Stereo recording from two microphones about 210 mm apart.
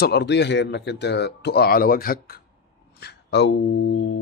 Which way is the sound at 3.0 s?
55° left (ahead or behind).